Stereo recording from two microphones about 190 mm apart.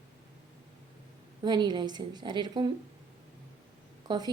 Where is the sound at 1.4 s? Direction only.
25° right (ahead or behind).